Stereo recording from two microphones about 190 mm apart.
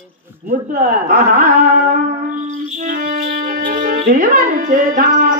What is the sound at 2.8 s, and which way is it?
Music, 50° right (ahead or behind).